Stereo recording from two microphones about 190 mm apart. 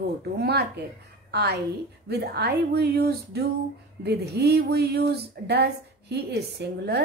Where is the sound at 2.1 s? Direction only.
60° right (ahead or behind).